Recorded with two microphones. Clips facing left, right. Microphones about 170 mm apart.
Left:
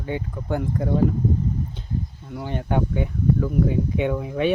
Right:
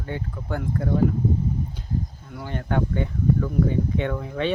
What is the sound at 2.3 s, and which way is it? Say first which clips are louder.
Speech: left 2 dB; 20° left (ahead or behind).